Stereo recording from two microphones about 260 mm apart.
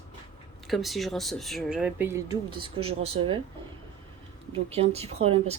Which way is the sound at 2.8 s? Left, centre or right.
Right.